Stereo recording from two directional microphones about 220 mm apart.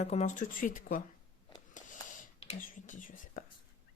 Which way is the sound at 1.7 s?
35° left (ahead or behind).